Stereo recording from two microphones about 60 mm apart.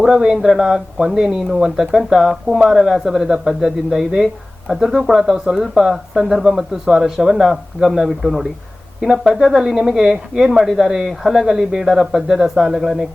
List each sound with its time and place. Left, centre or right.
0.1 s speech: centre